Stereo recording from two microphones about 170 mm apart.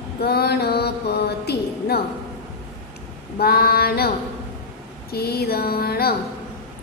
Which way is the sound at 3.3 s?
65° left (ahead or behind).